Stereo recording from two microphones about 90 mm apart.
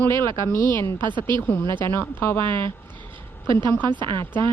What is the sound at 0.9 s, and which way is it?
Speech, 60° right (ahead or behind).